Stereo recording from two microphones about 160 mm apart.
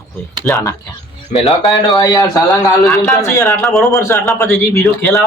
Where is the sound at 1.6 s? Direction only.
25° left (ahead or behind).